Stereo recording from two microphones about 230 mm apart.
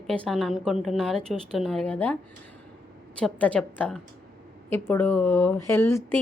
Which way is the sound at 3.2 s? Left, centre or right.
Centre.